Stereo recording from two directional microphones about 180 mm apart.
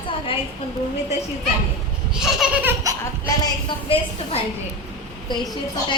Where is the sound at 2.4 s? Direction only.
10° right (ahead or behind).